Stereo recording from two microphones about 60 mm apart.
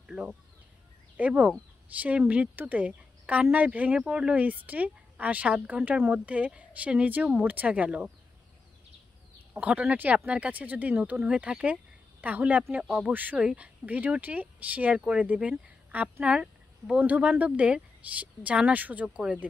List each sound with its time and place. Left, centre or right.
0.0 s a sound: centre
1.1 s speech: right
9.6 s speech: right
12.8 s speech: centre
13.1 s speech: right